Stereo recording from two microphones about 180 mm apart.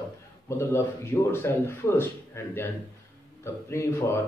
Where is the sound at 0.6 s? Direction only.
15° left (ahead or behind).